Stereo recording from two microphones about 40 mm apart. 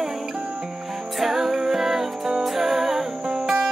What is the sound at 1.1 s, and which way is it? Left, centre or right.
Music, centre.